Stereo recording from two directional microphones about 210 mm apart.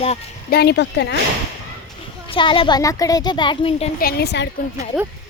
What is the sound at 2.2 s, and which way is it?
A woman's voice, 25° left (ahead or behind).